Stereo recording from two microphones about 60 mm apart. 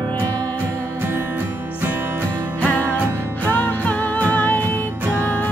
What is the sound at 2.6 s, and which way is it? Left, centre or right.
Music, left.